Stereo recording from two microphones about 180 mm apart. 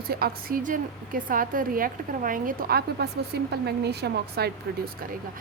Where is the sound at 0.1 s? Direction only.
55° right (ahead or behind).